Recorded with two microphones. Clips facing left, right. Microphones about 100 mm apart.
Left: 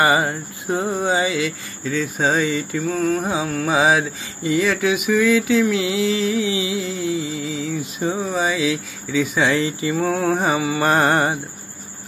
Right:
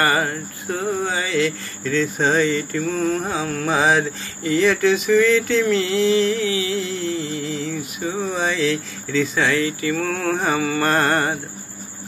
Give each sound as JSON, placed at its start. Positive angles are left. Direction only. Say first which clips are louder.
{"t": 0.0, "sound": "speech", "louder": "left 2 dB", "side_deg": 15}
{"t": 3.3, "sound": "mantra", "louder": "left 1 dB", "side_deg": 10}
{"t": 4.4, "sound": "speech", "louder": "even", "side_deg": 20}
{"t": 4.6, "sound": "speech", "louder": "right 2 dB", "side_deg": 5}
{"t": 6.4, "sound": "speech", "louder": "even", "side_deg": 15}
{"t": 6.8, "sound": "music", "louder": "left 1 dB", "side_deg": 5}
{"t": 7.8, "sound": "speech", "louder": "left 3 dB", "side_deg": 20}
{"t": 8.2, "sound": "speech", "louder": "right 2 dB", "side_deg": 5}
{"t": 9.5, "sound": "speech", "louder": "left 1 dB", "side_deg": 20}